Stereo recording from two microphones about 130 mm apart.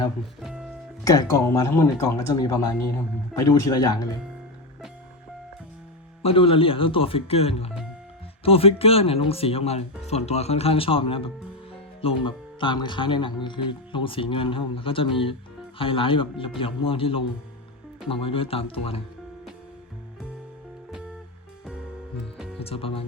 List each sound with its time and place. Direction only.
1.0 s speech: 25° left (ahead or behind)
6.2 s speech: 45° left (ahead or behind)
22.6 s speech: 45° left (ahead or behind)